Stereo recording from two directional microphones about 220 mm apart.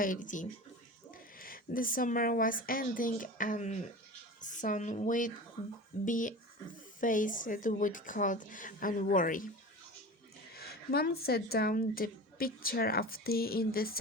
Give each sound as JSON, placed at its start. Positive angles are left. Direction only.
{"t": 0.0, "sound": "a woman's voice", "side_deg": 35}
{"t": 10.5, "sound": "speech", "side_deg": 45}